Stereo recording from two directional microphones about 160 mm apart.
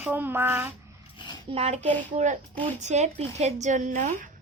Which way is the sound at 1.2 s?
30° left (ahead or behind).